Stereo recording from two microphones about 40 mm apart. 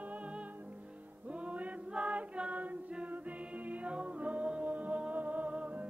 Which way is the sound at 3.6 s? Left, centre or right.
Right.